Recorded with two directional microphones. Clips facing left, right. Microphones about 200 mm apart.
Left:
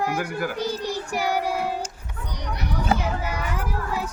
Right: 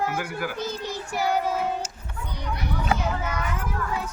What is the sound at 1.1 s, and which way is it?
Child singing, 15° left (ahead or behind).